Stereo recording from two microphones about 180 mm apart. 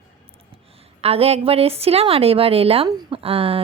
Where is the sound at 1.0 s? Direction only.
35° right (ahead or behind).